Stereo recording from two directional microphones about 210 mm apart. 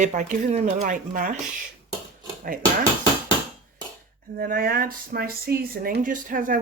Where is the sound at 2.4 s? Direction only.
40° right (ahead or behind).